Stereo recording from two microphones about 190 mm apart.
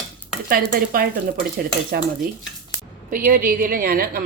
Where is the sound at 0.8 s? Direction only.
50° right (ahead or behind).